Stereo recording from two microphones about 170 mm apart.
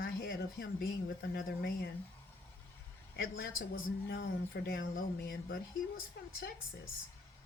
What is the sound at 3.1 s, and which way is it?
Speech, 65° left (ahead or behind).